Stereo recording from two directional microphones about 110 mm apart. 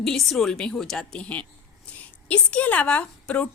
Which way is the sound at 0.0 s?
5° left (ahead or behind).